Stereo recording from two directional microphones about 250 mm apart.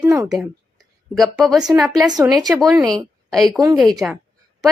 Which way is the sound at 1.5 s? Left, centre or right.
Centre.